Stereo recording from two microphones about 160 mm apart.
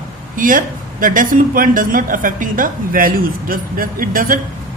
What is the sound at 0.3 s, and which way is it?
Speech, 55° right (ahead or behind).